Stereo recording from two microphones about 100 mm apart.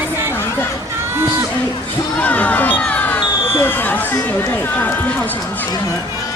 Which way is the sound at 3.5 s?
20° left (ahead or behind).